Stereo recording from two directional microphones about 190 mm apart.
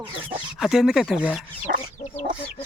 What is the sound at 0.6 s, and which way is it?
Speech, centre (ahead or behind).